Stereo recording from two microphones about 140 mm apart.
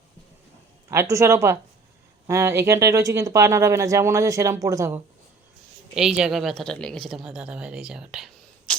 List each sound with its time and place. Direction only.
0.9 s speech: 20° right (ahead or behind)
5.9 s a woman's voice: 5° right (ahead or behind)